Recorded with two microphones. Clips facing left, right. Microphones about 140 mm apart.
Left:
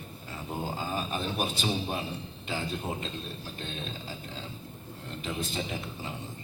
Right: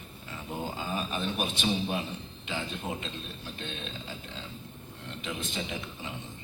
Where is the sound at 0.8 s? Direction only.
40° left (ahead or behind).